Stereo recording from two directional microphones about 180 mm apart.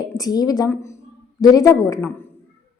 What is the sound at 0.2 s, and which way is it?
A woman's voice, 20° left (ahead or behind).